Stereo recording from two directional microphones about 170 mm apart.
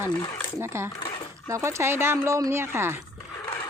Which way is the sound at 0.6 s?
15° right (ahead or behind).